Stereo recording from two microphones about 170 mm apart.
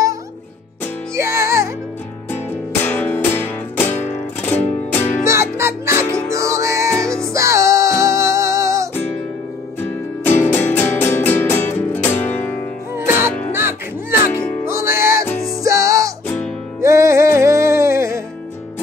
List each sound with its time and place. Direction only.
1.1 s music: 15° right (ahead or behind)
2.3 s music: 10° left (ahead or behind)
5.2 s music: 15° right (ahead or behind)
10.2 s music: 10° left (ahead or behind)
12.9 s music: 15° right (ahead or behind)